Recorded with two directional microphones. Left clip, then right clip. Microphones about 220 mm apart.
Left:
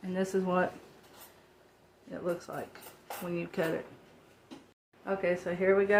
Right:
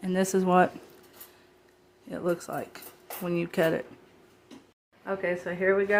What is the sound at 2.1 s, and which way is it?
Speech, 35° right (ahead or behind).